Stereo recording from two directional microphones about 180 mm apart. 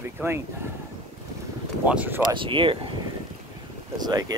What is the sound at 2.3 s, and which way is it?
Speech, 30° right (ahead or behind).